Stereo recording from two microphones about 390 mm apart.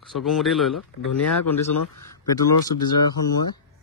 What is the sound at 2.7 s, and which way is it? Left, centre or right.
Speech, left.